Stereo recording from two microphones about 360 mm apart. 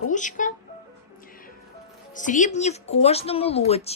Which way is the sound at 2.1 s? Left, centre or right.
Left.